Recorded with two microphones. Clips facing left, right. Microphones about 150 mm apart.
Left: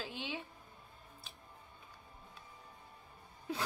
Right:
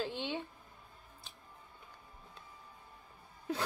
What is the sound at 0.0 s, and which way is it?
Speech, 5° left (ahead or behind).